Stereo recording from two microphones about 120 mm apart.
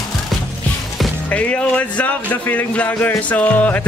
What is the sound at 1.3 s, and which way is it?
Speech, 10° left (ahead or behind).